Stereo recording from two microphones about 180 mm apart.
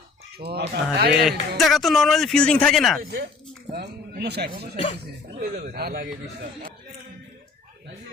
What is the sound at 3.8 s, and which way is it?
A man's voice, 65° right (ahead or behind).